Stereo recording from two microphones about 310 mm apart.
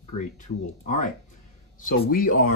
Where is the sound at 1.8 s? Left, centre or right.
Left.